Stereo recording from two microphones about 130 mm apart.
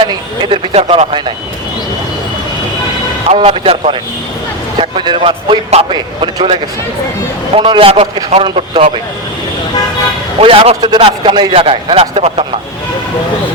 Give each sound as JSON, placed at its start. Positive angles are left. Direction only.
{"t": 0.0, "sound": "a man's voice", "side_deg": -40}
{"t": 0.7, "sound": "speech", "side_deg": -55}
{"t": 3.2, "sound": "a man's voice", "side_deg": -45}
{"t": 10.4, "sound": "a man's voice", "side_deg": -45}